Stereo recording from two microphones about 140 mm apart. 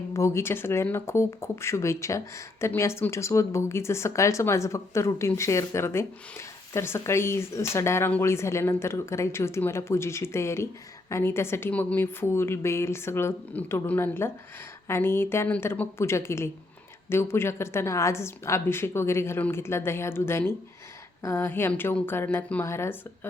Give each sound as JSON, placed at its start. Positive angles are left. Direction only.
{"t": 0.1, "sound": "a woman's voice", "side_deg": 20}